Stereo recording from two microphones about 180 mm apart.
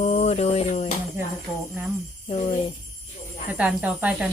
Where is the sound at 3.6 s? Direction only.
5° right (ahead or behind).